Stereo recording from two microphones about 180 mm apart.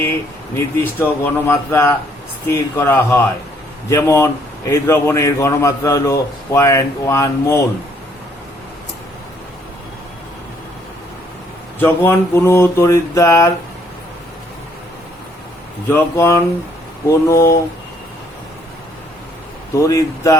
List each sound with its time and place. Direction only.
0.5 s a man's voice: 10° left (ahead or behind)
11.8 s a man's voice: 10° left (ahead or behind)
15.9 s a man's voice: 10° left (ahead or behind)
19.8 s a man's voice: 20° left (ahead or behind)